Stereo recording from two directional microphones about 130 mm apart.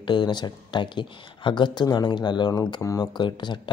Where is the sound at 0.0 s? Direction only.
35° left (ahead or behind).